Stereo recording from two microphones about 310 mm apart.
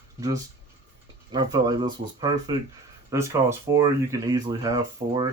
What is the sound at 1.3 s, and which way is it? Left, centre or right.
Speech, centre.